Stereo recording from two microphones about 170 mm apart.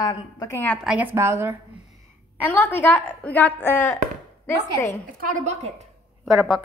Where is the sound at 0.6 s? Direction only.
5° left (ahead or behind).